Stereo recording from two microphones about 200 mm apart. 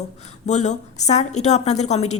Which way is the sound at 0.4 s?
35° left (ahead or behind).